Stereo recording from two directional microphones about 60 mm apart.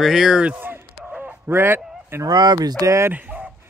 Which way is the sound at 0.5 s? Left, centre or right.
Right.